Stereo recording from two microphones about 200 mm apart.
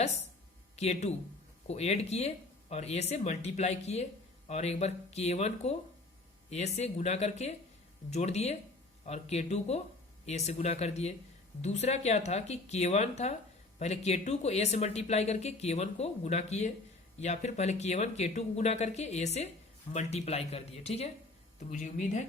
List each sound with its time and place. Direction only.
0.8 s speech: 35° left (ahead or behind)